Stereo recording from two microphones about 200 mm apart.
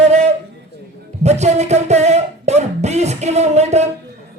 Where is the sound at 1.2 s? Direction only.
35° right (ahead or behind).